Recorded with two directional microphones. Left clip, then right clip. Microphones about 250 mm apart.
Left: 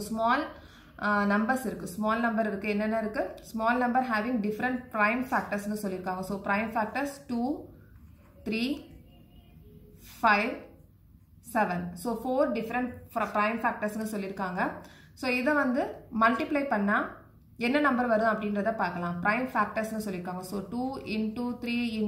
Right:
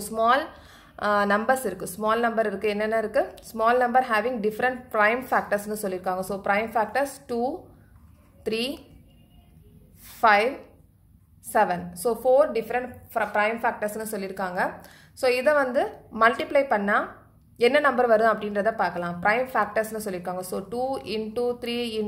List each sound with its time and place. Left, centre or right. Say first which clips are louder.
0.0 s a woman's voice: right 6 dB; right
10.0 s a sound: right 6 dB; right
11.5 s a woman's voice: right 6 dB; right